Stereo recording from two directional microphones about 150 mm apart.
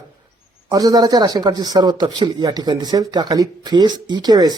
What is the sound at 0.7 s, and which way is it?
A man's voice, 25° right (ahead or behind).